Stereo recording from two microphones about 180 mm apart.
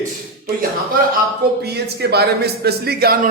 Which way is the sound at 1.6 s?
65° right (ahead or behind).